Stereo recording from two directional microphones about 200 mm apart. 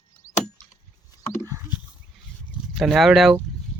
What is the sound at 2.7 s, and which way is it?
Speech, centre (ahead or behind).